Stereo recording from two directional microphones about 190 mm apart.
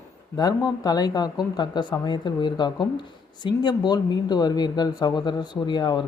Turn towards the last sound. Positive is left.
turn(degrees=20)  # may be behind; listen again after turning